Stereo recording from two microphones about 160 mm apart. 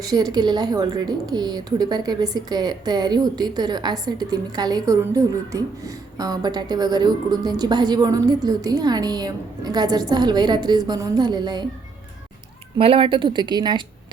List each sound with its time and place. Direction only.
0.0 s speech: 25° right (ahead or behind)
12.7 s speech: 35° right (ahead or behind)